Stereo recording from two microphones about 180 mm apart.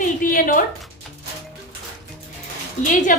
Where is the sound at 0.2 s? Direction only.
50° left (ahead or behind).